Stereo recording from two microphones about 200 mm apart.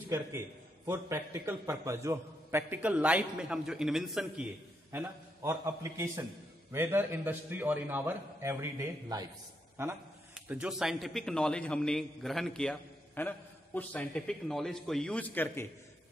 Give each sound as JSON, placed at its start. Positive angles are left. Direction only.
{"t": 0.8, "sound": "a man's voice", "side_deg": -10}
{"t": 4.9, "sound": "a man's voice", "side_deg": -15}